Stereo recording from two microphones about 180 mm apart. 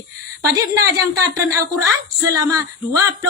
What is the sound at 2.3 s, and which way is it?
Speech, 20° right (ahead or behind).